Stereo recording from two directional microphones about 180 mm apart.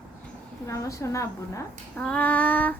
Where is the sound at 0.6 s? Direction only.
15° left (ahead or behind).